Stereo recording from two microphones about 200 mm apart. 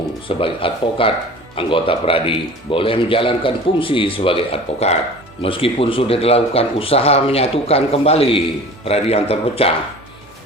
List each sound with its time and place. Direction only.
0.3 s a man's voice: 25° left (ahead or behind)